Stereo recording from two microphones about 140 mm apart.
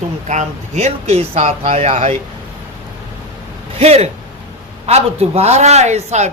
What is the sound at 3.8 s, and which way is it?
A man's voice, 50° right (ahead or behind).